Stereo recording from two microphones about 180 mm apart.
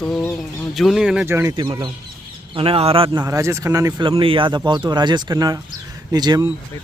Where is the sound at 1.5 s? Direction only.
25° right (ahead or behind).